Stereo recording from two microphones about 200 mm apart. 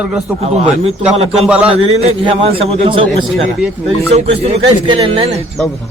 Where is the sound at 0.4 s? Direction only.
30° right (ahead or behind).